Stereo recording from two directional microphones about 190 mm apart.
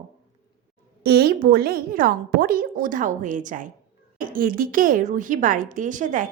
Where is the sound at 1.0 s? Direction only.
55° right (ahead or behind).